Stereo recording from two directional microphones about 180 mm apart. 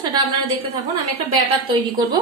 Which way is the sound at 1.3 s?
30° right (ahead or behind).